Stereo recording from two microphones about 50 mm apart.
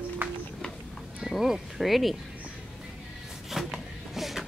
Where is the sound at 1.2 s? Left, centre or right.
Centre.